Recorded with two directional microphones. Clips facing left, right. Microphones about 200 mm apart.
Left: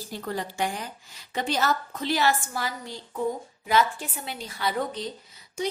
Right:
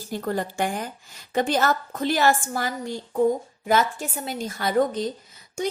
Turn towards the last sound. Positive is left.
turn(degrees=-50)  # may be behind; listen again after turning